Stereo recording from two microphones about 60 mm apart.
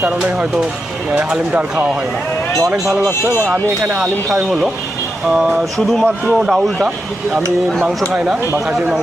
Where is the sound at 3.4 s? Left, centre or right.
Right.